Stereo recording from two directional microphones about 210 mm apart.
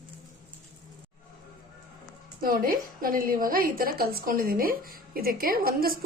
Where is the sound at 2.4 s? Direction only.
40° right (ahead or behind).